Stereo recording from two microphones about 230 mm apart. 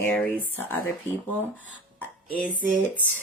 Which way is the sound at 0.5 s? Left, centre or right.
Centre.